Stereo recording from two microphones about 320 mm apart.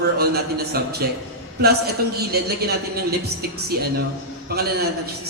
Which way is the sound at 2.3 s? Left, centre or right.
Right.